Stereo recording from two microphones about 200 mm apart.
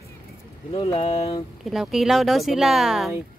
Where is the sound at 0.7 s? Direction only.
25° left (ahead or behind).